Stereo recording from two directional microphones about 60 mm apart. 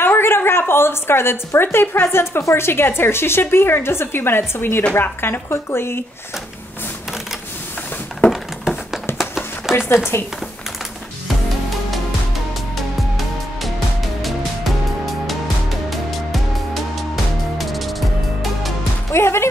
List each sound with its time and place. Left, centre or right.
0.0 s a woman's voice: left
8.3 s a sound: centre
9.9 s a woman's voice: left
15.9 s music: centre
19.1 s speech: left